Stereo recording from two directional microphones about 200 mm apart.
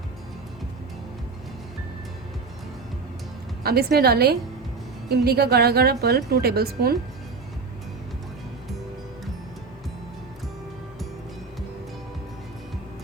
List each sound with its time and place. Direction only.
3.6 s a woman's voice: 50° right (ahead or behind)